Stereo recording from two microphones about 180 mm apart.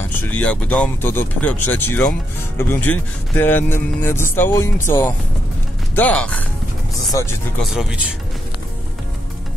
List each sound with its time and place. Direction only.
0.1 s speech: 10° left (ahead or behind)
7.1 s speech: 20° left (ahead or behind)
7.6 s speech: 5° right (ahead or behind)